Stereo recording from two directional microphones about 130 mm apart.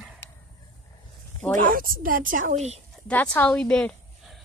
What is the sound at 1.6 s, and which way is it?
A woman's voice, 90° right.